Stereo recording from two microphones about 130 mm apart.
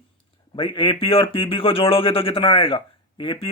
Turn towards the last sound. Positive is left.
turn(degrees=40)  # may be behind; listen again after turning